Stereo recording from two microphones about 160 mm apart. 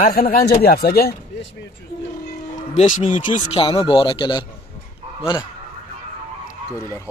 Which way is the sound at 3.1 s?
35° left (ahead or behind).